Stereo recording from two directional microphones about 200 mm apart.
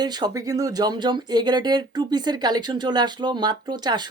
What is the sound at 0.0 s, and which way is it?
Speech, 20° right (ahead or behind).